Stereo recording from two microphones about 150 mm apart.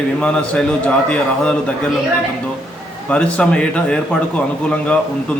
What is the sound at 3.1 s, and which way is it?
A man's voice, 10° left (ahead or behind).